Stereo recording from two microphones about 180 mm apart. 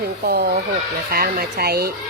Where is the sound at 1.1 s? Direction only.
60° right (ahead or behind).